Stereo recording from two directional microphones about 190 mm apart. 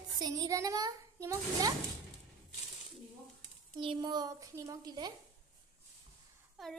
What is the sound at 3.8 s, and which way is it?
A child's voice, 25° right (ahead or behind).